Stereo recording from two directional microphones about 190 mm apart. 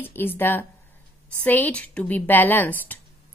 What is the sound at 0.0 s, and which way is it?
A woman's voice, 10° left (ahead or behind).